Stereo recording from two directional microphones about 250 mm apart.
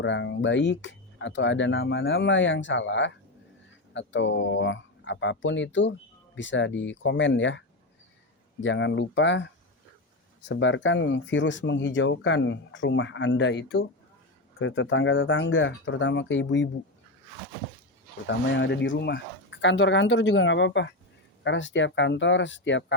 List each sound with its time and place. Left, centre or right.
0.0 s speech: left
8.6 s speech: left
18.3 s speech: left